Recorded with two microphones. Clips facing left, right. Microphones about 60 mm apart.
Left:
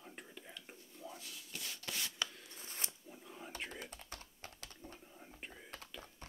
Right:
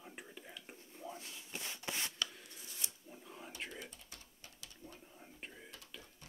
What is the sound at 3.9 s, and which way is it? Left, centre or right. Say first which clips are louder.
Typing: left 5 dB; left.